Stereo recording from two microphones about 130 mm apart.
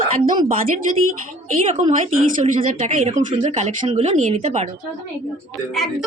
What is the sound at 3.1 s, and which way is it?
Speech, 65° right (ahead or behind).